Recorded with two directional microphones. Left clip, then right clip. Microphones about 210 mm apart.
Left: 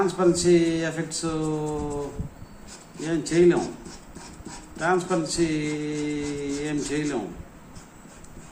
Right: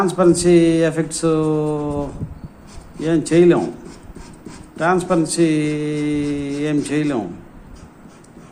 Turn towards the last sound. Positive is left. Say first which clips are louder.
# right 8 dB
turn(degrees=-50)  # may be behind; listen again after turning